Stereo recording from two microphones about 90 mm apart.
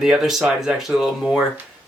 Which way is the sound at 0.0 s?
5° right (ahead or behind).